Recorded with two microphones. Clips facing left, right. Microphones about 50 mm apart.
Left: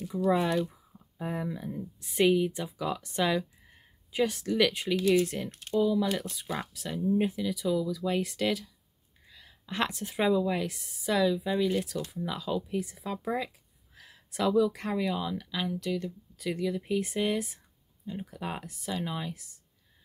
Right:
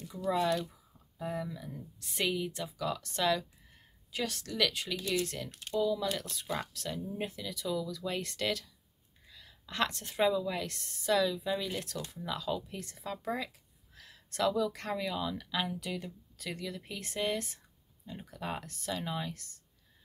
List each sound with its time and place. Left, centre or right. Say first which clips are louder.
0.3 s speech: left 3 dB; centre
15.7 s speech: left 6 dB; centre
16.3 s speech: left 9 dB; centre